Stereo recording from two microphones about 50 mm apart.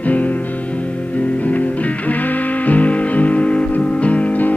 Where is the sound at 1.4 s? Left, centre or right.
Left.